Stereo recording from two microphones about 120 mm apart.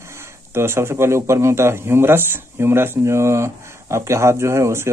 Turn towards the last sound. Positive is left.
turn(degrees=-25)  # may be behind; listen again after turning